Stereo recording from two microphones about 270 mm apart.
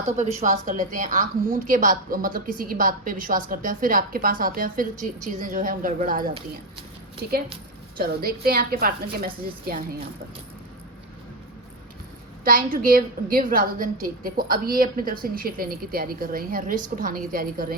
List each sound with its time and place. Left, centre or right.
0.2 s a woman's voice: right
7.9 s a woman's voice: right
12.7 s a woman's voice: right